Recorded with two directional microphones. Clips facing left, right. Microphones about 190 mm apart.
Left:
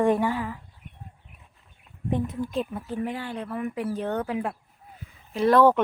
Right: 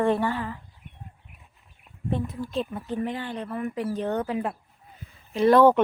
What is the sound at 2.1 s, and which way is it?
Speech, 20° left (ahead or behind).